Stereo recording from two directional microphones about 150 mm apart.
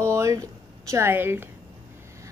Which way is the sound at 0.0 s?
20° right (ahead or behind).